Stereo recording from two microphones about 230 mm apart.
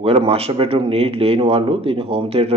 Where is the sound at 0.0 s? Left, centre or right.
Right.